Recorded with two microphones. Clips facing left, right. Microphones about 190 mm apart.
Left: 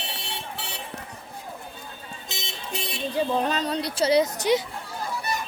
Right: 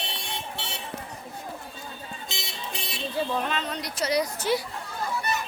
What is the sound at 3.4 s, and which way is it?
Speech, 35° left (ahead or behind).